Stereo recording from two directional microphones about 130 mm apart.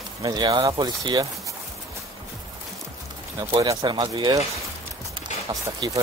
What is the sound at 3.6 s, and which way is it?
Speech, 30° right (ahead or behind).